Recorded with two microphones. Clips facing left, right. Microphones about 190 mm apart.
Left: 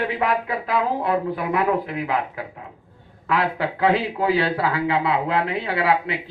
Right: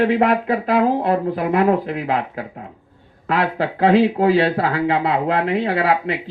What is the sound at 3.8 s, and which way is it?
Speech, 60° right (ahead or behind).